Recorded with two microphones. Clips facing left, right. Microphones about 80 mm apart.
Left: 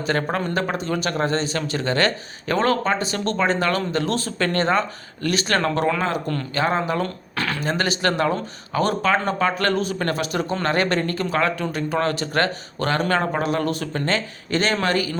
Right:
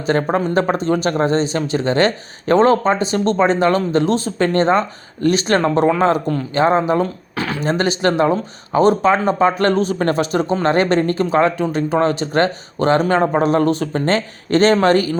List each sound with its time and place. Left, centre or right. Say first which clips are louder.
0.0 s speech: right 6 dB; right